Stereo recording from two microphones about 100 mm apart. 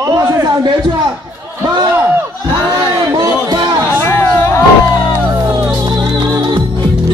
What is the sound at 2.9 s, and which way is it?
Speech, 45° right (ahead or behind).